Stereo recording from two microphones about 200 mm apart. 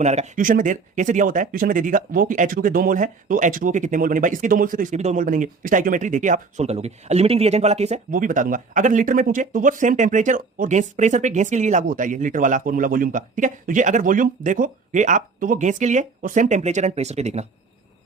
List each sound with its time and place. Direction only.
0.0 s speech: 35° right (ahead or behind)